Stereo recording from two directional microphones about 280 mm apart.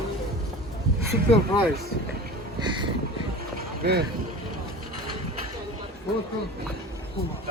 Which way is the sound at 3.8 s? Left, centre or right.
Right.